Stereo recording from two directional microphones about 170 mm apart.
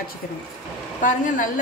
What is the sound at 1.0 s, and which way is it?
Speech, 50° left (ahead or behind).